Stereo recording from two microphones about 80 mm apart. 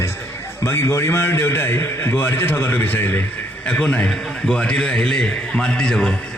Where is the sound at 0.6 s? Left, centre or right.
Left.